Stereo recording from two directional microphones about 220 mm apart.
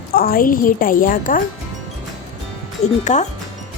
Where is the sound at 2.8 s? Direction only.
30° left (ahead or behind).